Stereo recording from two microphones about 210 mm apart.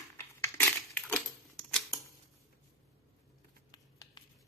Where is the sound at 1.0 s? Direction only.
5° left (ahead or behind).